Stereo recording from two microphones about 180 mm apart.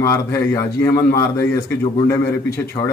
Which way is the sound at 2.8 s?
20° left (ahead or behind).